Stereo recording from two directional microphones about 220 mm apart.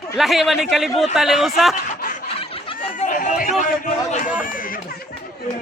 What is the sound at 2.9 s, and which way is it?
Speech, 35° left (ahead or behind).